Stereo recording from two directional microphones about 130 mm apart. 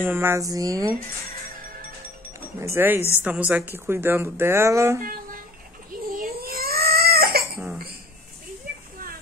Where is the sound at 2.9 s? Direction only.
20° left (ahead or behind).